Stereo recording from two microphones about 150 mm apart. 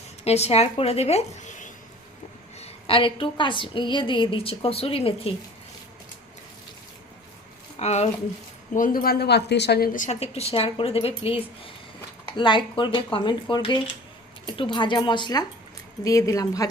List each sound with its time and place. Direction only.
0.3 s speech: 45° left (ahead or behind)
2.6 s a woman's voice: 40° left (ahead or behind)
7.8 s speech: 50° left (ahead or behind)
8.7 s a woman's voice: 65° left (ahead or behind)
10.5 s a woman's voice: 40° left (ahead or behind)
12.4 s a woman's voice: 35° left (ahead or behind)